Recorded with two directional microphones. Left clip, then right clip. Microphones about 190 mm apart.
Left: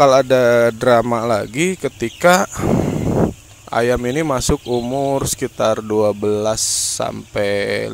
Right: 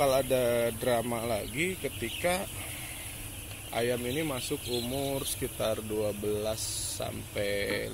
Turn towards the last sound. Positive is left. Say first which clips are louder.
# left 13 dB
turn(degrees=45)  # may be behind; listen again after turning